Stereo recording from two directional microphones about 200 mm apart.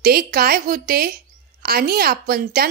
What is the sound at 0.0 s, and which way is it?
A woman's voice, 50° right (ahead or behind).